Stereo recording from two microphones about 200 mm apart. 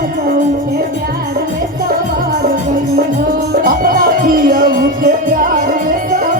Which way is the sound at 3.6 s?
45° right (ahead or behind).